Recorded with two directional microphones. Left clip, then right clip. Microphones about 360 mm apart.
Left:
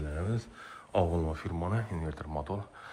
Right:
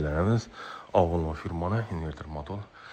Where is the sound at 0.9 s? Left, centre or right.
Centre.